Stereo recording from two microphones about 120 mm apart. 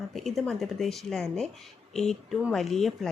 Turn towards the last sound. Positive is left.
turn(degrees=0)  # may be behind; listen again after turning